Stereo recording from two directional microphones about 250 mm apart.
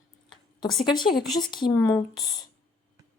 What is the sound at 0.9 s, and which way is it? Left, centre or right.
A woman's voice, centre.